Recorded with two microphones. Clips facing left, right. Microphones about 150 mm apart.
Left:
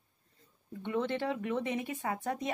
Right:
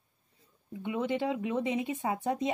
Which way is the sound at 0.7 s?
10° right (ahead or behind).